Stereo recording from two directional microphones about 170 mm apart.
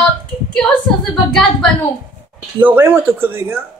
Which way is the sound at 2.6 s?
10° right (ahead or behind).